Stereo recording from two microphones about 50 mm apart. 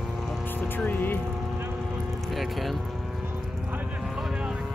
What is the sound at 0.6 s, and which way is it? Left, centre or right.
Vehicle, left.